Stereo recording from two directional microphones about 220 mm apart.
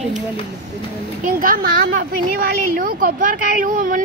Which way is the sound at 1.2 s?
40° right (ahead or behind).